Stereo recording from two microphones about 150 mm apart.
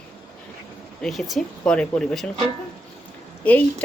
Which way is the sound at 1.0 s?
5° left (ahead or behind).